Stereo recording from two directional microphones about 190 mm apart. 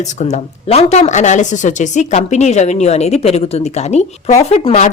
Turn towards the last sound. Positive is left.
turn(degrees=35)  # may be behind; listen again after turning